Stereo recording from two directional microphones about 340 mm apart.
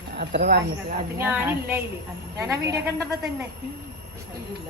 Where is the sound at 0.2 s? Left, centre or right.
Right.